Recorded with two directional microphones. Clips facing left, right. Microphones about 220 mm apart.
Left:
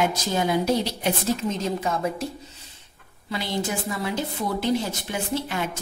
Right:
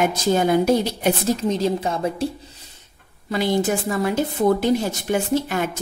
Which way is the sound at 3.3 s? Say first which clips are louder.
Right 7 dB; 50° right (ahead or behind).